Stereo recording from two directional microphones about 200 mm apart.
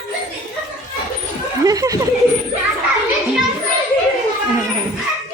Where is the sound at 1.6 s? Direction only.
15° right (ahead or behind).